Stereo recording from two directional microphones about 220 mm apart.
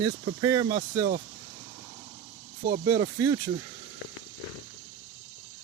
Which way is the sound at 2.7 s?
20° right (ahead or behind).